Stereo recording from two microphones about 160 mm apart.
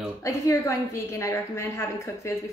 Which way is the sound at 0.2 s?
15° left (ahead or behind).